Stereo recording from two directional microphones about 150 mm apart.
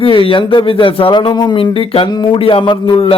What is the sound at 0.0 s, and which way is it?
A man's voice, 35° left (ahead or behind).